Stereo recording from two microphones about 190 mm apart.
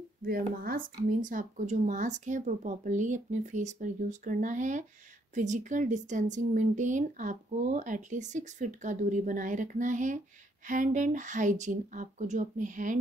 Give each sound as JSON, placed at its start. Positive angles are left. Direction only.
{"t": 0.2, "sound": "speech", "side_deg": -50}